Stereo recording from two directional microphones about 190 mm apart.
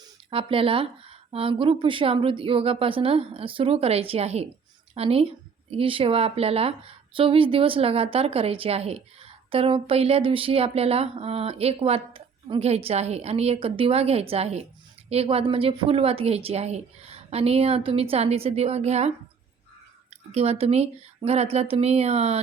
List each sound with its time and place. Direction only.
0.3 s speech: 30° right (ahead or behind)
20.3 s speech: 35° right (ahead or behind)